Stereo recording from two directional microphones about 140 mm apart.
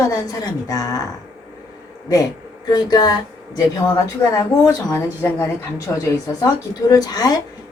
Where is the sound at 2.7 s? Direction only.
30° left (ahead or behind).